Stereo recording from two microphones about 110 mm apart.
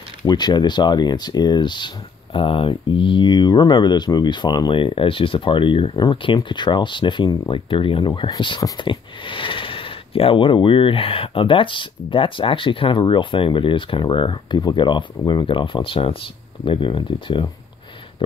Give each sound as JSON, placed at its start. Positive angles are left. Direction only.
{"t": 0.3, "sound": "speech", "side_deg": 40}